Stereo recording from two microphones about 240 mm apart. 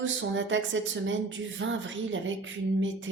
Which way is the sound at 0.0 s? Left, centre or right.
Right.